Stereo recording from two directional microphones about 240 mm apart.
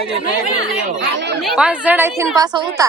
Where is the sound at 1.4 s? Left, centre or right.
Centre.